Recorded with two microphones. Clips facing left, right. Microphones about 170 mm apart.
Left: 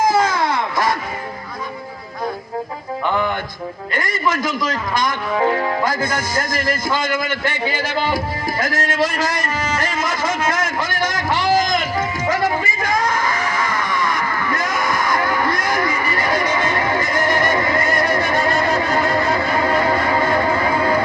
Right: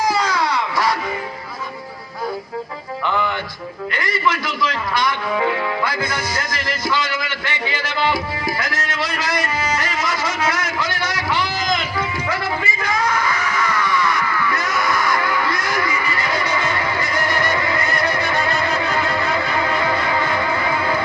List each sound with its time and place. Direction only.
0.0 s baby cry: 50° left (ahead or behind)
3.1 s speech: 50° left (ahead or behind)
3.9 s music: 45° left (ahead or behind)